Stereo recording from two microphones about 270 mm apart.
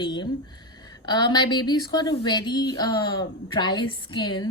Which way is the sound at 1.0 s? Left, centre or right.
Centre.